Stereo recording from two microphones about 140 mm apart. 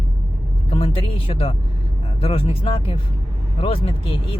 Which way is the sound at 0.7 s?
40° left (ahead or behind).